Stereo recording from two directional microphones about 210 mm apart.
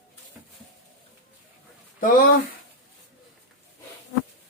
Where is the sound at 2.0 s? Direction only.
40° left (ahead or behind).